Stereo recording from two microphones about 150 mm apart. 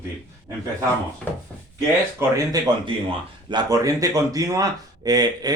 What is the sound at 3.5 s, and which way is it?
Speech, 25° right (ahead or behind).